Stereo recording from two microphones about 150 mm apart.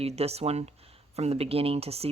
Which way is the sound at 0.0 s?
45° right (ahead or behind).